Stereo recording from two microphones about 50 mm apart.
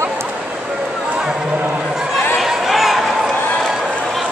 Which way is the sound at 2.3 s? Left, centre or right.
Centre.